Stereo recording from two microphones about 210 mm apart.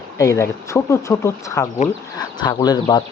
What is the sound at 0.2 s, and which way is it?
Speech, 15° left (ahead or behind).